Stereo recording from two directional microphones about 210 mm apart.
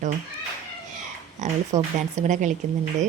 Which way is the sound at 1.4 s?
35° right (ahead or behind).